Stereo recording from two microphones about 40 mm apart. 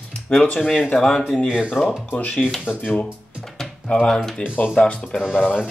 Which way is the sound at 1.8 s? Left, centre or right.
Left.